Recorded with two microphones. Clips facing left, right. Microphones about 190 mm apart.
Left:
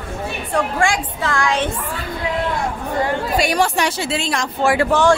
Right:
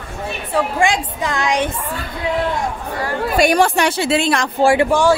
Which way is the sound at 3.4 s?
55° right (ahead or behind).